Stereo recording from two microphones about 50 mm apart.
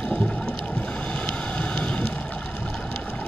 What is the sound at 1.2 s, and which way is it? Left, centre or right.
Vehicle, left.